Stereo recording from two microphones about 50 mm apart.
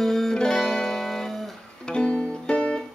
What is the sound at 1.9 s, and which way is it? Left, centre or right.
Music, left.